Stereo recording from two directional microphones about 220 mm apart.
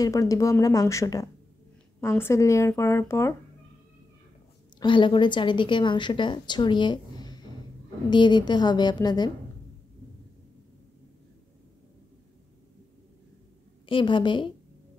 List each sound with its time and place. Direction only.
0.0 s speech: 15° left (ahead or behind)
4.7 s a woman's voice: 20° left (ahead or behind)
13.8 s a woman's voice: 20° left (ahead or behind)